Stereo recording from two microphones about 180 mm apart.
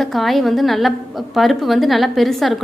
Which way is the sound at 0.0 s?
Centre (ahead or behind).